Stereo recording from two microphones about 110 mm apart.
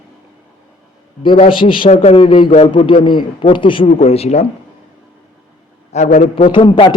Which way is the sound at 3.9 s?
70° left (ahead or behind).